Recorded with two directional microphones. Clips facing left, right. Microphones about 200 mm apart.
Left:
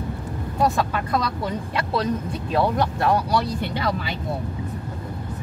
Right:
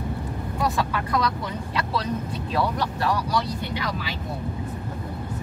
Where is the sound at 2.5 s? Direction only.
55° left (ahead or behind).